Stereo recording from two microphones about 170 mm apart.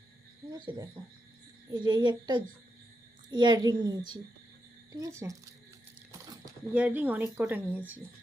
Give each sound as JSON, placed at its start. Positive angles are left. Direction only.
{"t": 0.6, "sound": "a woman's voice", "side_deg": -25}
{"t": 6.1, "sound": "a sound", "side_deg": -20}
{"t": 6.7, "sound": "speech", "side_deg": -10}